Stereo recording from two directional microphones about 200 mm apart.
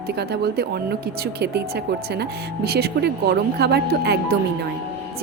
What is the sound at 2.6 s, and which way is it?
A woman's voice, 50° right (ahead or behind).